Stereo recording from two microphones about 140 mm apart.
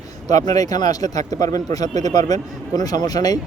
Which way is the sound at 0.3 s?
30° left (ahead or behind).